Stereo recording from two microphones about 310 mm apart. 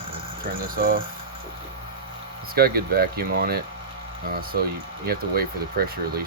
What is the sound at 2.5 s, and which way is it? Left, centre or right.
Speech, right.